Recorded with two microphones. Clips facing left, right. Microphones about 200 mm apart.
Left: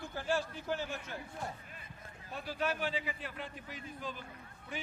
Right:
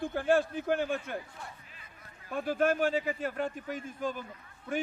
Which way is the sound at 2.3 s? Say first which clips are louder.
Right 9 dB; 50° right (ahead or behind).